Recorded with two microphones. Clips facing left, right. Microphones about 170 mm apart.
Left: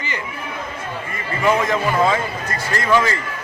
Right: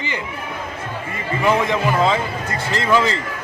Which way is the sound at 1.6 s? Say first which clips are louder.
Even; 20° right (ahead or behind).